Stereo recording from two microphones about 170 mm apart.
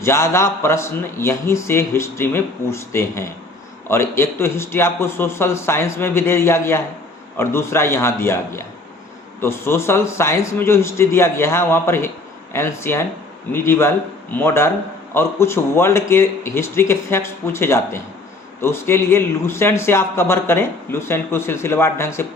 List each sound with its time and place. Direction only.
0.0 s a man's voice: 15° left (ahead or behind)